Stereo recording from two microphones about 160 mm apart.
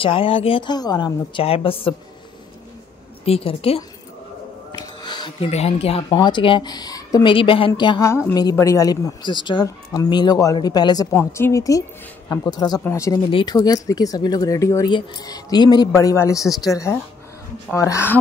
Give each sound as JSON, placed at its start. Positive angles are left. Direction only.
{"t": 0.0, "sound": "a woman's voice", "side_deg": 35}
{"t": 3.3, "sound": "a woman's voice", "side_deg": 35}
{"t": 4.7, "sound": "music", "side_deg": 30}
{"t": 5.5, "sound": "a woman's voice", "side_deg": 40}
{"t": 7.3, "sound": "a woman's voice", "side_deg": 35}
{"t": 13.3, "sound": "a woman's voice", "side_deg": 35}
{"t": 13.8, "sound": "speech", "side_deg": 20}